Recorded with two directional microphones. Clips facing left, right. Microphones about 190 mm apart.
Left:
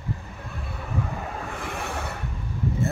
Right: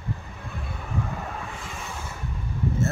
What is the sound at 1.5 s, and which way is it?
Vehicle, 65° left (ahead or behind).